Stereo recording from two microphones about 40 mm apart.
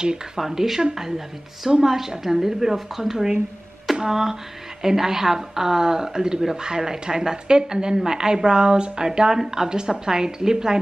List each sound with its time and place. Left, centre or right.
0.4 s a woman's voice: centre